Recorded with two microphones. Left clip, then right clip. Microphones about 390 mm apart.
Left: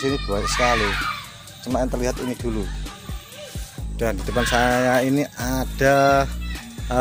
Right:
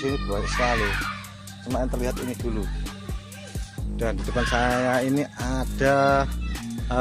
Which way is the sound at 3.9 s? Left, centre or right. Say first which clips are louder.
Left 4 dB; right.